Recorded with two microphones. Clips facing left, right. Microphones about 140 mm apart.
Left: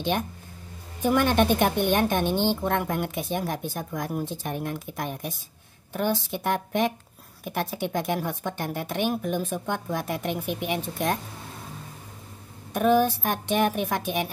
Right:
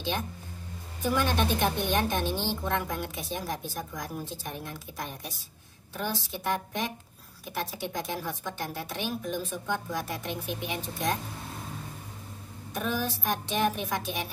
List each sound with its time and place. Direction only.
1.0 s a woman's voice: 55° left (ahead or behind)
12.7 s a woman's voice: 55° left (ahead or behind)